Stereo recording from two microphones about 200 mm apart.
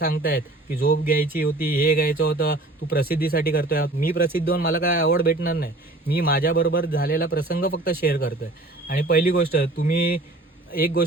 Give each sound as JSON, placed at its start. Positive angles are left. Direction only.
{"t": 0.0, "sound": "speech", "side_deg": 45}